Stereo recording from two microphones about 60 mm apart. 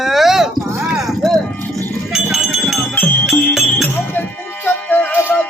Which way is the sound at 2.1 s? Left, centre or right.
Centre.